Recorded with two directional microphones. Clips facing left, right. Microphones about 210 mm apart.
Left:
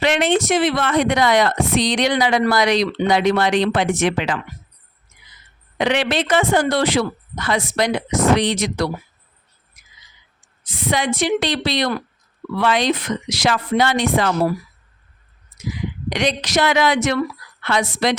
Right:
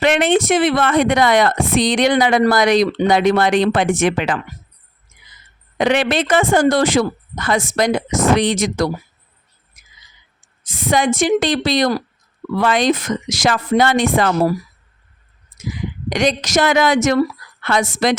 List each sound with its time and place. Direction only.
0.0 s speech: 55° right (ahead or behind)
5.7 s speech: 45° right (ahead or behind)
9.8 s a sound: 45° right (ahead or behind)
10.6 s speech: 45° right (ahead or behind)
15.5 s a woman's voice: 45° right (ahead or behind)